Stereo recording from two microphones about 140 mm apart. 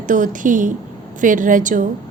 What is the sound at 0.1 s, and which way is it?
A woman's voice, 70° right (ahead or behind).